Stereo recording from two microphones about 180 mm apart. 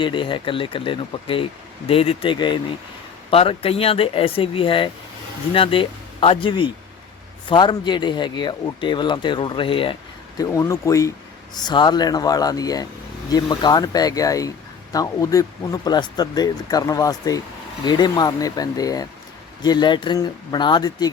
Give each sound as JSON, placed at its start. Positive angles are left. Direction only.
{"t": 0.0, "sound": "speech", "side_deg": 25}